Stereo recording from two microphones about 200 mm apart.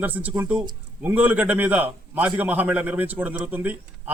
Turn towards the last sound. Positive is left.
turn(degrees=-10)  # may be behind; listen again after turning